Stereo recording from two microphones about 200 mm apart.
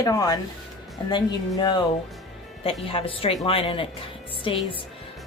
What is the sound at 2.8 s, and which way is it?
A woman's voice, 25° left (ahead or behind).